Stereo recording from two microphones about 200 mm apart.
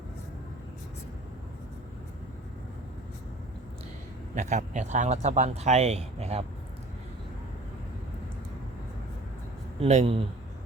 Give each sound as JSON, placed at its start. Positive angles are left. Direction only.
{"t": 4.4, "sound": "speech", "side_deg": -35}
{"t": 9.8, "sound": "speech", "side_deg": -30}